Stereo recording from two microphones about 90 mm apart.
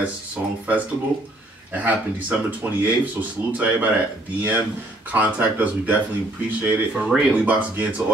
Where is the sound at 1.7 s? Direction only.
15° right (ahead or behind).